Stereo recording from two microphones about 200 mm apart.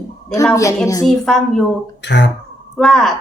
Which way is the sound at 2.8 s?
Centre (ahead or behind).